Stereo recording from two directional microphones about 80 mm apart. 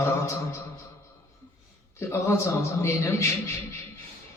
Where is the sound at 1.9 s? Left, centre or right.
Left.